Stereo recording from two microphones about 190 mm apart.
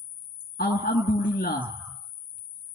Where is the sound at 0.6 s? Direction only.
50° left (ahead or behind).